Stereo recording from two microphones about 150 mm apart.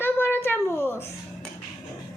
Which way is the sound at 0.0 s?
15° left (ahead or behind).